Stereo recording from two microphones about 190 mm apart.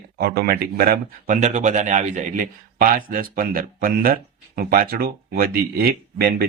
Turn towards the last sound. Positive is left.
turn(degrees=-55)  # may be behind; listen again after turning